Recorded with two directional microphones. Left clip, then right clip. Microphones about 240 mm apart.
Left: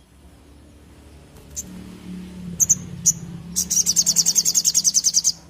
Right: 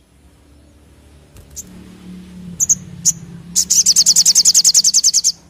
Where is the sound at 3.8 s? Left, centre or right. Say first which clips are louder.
Right 9 dB; right.